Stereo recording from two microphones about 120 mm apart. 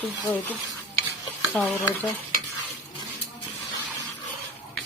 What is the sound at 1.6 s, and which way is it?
Speech, 15° left (ahead or behind).